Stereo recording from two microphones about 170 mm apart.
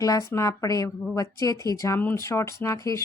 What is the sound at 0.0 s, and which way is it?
Speech, 20° left (ahead or behind).